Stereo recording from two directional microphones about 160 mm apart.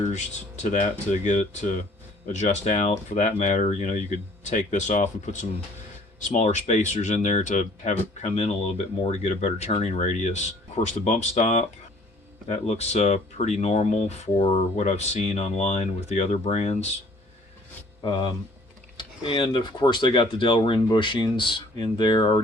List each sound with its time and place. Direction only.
0.1 s speech: 45° left (ahead or behind)
18.0 s speech: 30° left (ahead or behind)